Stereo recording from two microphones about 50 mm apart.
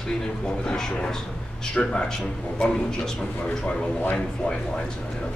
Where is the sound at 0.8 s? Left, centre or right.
Centre.